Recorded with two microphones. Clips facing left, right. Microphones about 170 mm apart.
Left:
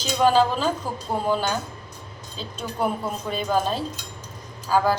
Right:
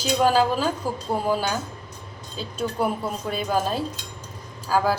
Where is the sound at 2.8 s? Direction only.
5° right (ahead or behind).